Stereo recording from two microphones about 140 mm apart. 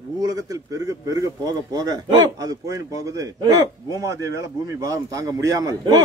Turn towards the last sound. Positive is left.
turn(degrees=-25)  # may be behind; listen again after turning